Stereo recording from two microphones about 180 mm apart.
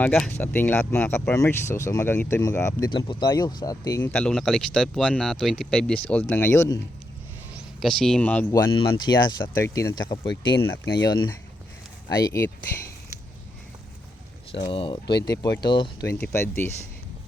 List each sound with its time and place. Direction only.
0.0 s speech: 10° left (ahead or behind)
7.5 s speech: centre (ahead or behind)
8.7 s speech: 25° left (ahead or behind)
14.5 s speech: 30° left (ahead or behind); by 16.7 s 15° left (ahead or behind)